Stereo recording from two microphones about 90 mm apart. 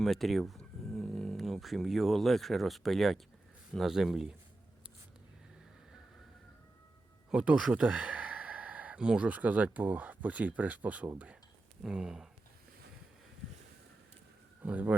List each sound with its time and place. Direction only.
0.0 s speech: centre (ahead or behind)
7.3 s speech: 10° right (ahead or behind)
14.6 s speech: 15° right (ahead or behind)